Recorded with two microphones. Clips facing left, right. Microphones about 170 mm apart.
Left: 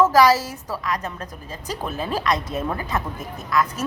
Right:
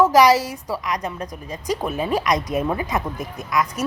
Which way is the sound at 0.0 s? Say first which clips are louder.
Right 2 dB; 20° right (ahead or behind).